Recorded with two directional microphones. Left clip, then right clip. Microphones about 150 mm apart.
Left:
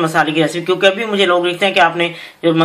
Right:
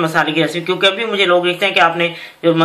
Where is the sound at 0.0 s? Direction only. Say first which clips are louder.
Left 1 dB; 45° left (ahead or behind).